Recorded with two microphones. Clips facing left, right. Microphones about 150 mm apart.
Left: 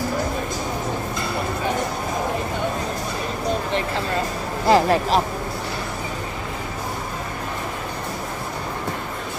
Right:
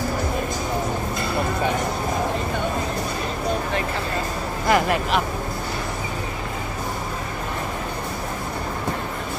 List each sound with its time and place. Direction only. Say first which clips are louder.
4.6 s speech: left 4 dB; 30° left (ahead or behind)